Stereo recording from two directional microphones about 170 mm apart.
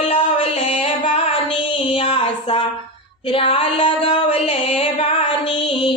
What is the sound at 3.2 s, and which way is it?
Music, 30° left (ahead or behind).